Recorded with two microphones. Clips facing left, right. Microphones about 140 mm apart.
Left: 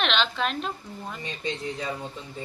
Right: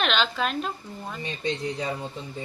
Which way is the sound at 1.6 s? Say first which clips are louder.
Right 2 dB; 35° right (ahead or behind).